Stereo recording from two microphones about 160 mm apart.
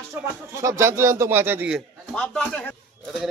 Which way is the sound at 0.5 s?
20° right (ahead or behind).